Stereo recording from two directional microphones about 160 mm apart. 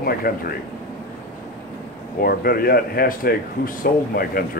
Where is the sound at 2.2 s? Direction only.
70° left (ahead or behind).